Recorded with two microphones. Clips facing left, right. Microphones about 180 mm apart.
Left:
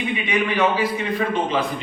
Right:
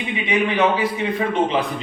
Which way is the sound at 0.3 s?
25° right (ahead or behind).